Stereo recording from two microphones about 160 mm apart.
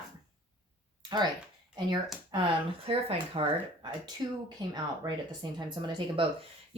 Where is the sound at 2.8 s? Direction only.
35° right (ahead or behind).